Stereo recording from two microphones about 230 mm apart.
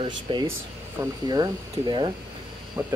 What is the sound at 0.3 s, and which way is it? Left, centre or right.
Speech, right.